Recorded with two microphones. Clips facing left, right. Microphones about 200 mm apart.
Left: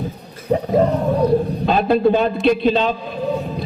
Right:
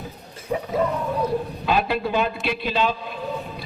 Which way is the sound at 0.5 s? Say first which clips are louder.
Left 7 dB; 40° left (ahead or behind).